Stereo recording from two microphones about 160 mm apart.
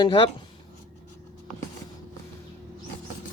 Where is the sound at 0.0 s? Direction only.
30° left (ahead or behind).